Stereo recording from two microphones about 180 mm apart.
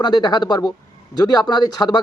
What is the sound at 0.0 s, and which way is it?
Speech, 25° left (ahead or behind).